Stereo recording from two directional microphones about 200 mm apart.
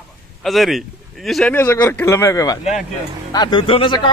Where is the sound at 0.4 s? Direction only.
Centre (ahead or behind).